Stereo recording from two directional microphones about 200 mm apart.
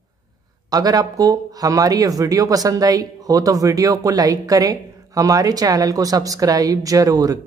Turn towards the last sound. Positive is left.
turn(degrees=-15)  # may be behind; listen again after turning